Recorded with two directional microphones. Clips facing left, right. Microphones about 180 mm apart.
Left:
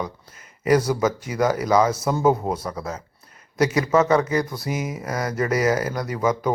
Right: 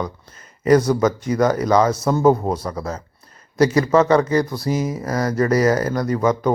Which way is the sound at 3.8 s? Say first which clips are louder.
Right 1 dB; 5° left (ahead or behind).